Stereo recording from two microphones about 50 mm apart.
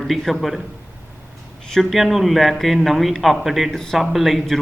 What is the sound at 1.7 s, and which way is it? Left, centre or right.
A man's voice, centre.